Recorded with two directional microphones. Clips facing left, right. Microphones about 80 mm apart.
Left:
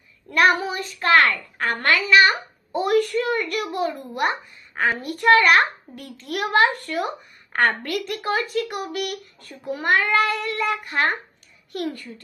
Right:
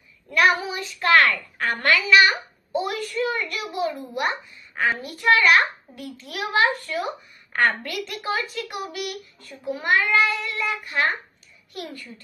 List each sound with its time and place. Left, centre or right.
0.3 s speech: left
1.0 s speech: left
2.7 s a child's voice: left